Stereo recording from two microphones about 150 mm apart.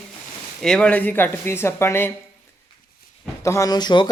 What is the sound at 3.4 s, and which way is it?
Speech, 20° left (ahead or behind).